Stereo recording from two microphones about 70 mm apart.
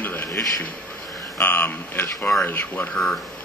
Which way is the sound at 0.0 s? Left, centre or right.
Left.